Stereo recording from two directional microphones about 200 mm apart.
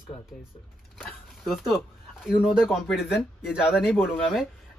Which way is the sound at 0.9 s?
Centre (ahead or behind).